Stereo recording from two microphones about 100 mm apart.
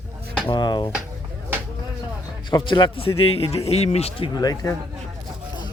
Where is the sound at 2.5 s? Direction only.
50° left (ahead or behind); by 4.3 s 90° left.